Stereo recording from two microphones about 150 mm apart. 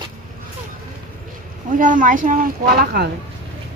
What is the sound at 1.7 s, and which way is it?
Speech, 60° right (ahead or behind).